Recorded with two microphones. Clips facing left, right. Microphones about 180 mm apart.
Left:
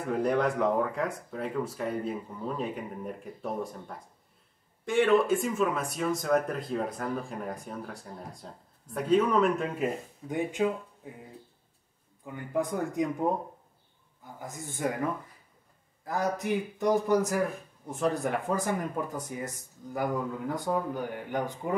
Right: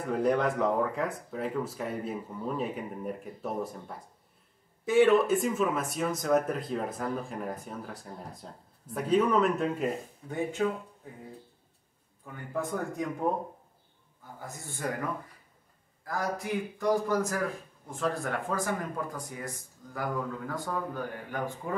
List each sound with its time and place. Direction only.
0.1 s speech: centre (ahead or behind)
4.8 s speech: 5° right (ahead or behind)
10.2 s speech: 15° left (ahead or behind)
12.3 s speech: 15° left (ahead or behind)
14.4 s a man's voice: 20° left (ahead or behind)
16.0 s a man's voice: 20° left (ahead or behind)